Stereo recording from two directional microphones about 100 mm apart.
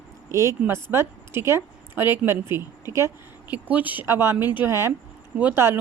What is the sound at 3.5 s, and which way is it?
Speech, 15° right (ahead or behind).